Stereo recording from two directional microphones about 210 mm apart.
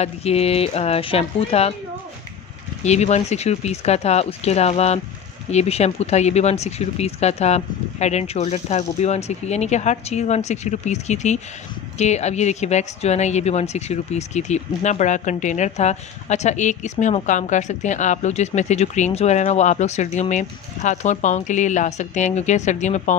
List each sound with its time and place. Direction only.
0.0 s speech: 30° left (ahead or behind)
2.8 s speech: 30° left (ahead or behind)